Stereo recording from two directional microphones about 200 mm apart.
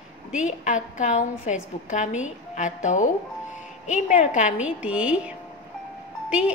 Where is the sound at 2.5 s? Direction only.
40° left (ahead or behind).